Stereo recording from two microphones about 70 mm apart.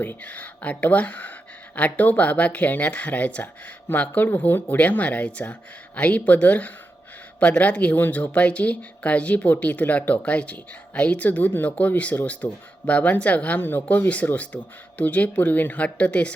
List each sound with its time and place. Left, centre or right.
0.0 s speech: left